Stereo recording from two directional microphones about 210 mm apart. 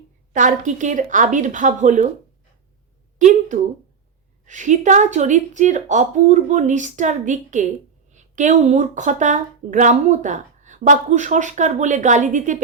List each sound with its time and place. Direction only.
0.3 s speech: 35° right (ahead or behind)
3.2 s speech: 35° right (ahead or behind)